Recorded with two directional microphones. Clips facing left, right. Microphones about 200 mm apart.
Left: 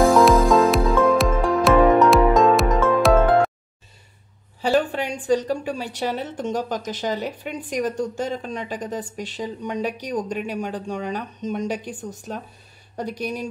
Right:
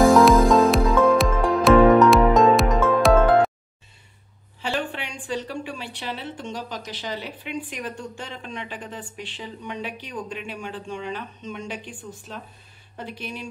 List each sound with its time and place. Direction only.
0.5 s music: centre (ahead or behind)
4.6 s a woman's voice: 40° left (ahead or behind)